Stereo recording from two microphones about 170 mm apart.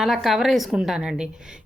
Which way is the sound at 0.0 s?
Centre (ahead or behind).